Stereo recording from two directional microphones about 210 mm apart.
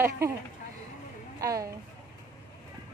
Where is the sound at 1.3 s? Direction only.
15° right (ahead or behind).